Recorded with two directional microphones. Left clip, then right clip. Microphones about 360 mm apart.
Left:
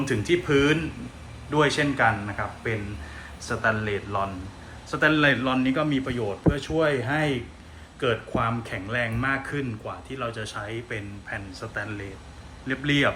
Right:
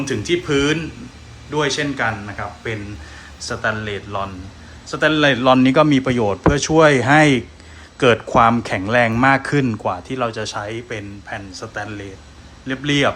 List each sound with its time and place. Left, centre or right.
0.0 s speech: centre